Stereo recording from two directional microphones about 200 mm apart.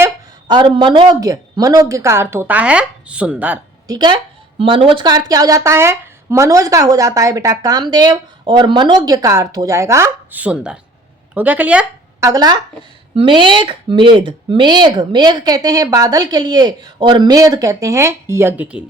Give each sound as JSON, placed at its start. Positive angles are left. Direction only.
{"t": 0.0, "sound": "speech", "side_deg": -20}
{"t": 3.9, "sound": "a woman's voice", "side_deg": -20}
{"t": 12.3, "sound": "speech", "side_deg": -20}